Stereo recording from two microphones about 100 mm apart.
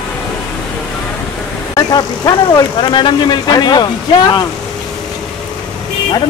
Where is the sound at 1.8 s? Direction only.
45° left (ahead or behind).